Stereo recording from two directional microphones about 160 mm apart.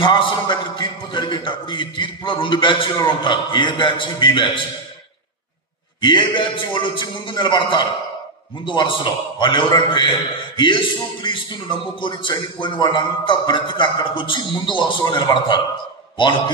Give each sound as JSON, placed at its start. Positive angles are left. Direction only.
{"t": 0.0, "sound": "a man's voice", "side_deg": 30}
{"t": 5.9, "sound": "a man's voice", "side_deg": 30}